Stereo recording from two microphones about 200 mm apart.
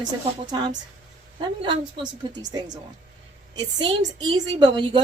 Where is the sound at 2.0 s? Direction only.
20° right (ahead or behind).